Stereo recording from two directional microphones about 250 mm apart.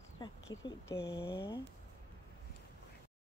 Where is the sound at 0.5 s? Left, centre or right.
Centre.